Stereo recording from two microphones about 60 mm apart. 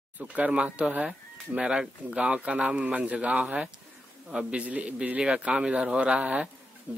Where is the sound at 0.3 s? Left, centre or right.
Centre.